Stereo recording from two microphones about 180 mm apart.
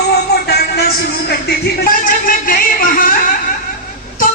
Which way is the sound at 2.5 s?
50° left (ahead or behind).